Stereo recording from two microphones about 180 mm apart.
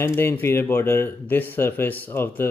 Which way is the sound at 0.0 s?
15° left (ahead or behind).